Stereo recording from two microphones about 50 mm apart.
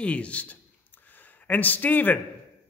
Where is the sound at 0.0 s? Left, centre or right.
Left.